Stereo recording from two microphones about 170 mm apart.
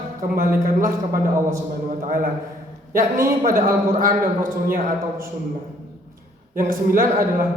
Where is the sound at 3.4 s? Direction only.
50° right (ahead or behind).